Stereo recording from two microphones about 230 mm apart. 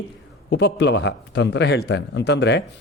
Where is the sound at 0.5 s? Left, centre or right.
Left.